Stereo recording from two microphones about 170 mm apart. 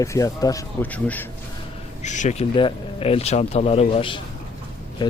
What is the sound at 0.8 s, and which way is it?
Speech, 10° left (ahead or behind).